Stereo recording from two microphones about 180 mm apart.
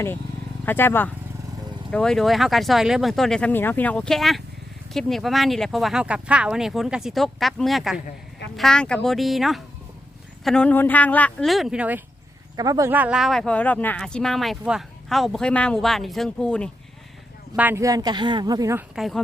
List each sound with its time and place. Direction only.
0.6 s speech: 10° left (ahead or behind); by 12.0 s 10° right (ahead or behind)
12.5 s speech: 20° right (ahead or behind); by 16.6 s 5° left (ahead or behind)
17.6 s speech: 15° right (ahead or behind)
18.9 s speech: centre (ahead or behind)